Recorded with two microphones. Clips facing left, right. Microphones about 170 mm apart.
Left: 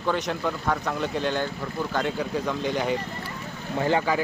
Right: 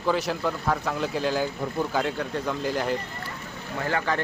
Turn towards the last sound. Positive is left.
turn(degrees=20)  # may be behind; listen again after turning